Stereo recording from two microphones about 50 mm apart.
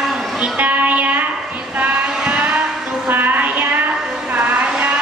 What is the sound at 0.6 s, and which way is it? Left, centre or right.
Music, right.